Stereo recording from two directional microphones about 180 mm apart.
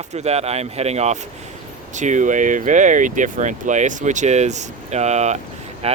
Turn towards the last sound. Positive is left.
turn(degrees=-35)  # may be behind; listen again after turning